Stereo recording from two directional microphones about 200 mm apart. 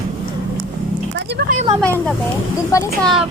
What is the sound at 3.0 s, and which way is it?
Child singing, centre (ahead or behind).